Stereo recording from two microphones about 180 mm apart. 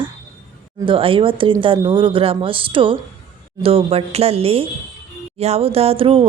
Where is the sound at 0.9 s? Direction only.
30° right (ahead or behind).